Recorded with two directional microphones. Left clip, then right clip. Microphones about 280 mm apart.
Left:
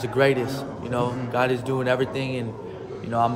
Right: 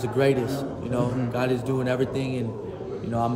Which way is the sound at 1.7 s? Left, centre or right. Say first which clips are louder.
Left 2 dB; left.